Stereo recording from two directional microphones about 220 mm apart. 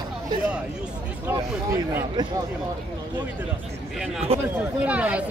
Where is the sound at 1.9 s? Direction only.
20° right (ahead or behind).